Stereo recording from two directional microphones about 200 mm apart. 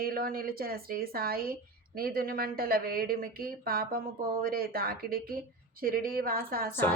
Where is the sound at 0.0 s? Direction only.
45° right (ahead or behind).